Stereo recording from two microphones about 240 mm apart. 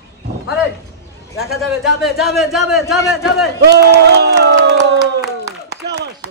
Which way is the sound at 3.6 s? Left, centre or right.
Right.